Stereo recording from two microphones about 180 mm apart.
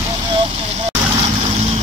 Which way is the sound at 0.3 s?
30° right (ahead or behind).